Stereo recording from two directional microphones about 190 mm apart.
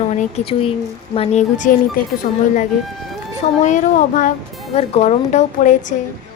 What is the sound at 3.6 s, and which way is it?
A woman's voice, 40° left (ahead or behind).